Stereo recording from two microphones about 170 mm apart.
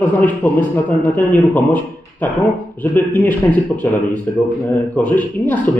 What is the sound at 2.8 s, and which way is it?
A man's voice, 10° left (ahead or behind).